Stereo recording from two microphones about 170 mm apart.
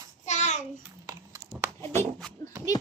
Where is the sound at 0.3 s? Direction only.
45° left (ahead or behind).